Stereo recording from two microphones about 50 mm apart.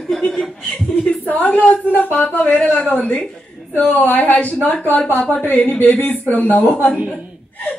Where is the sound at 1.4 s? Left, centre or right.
Left.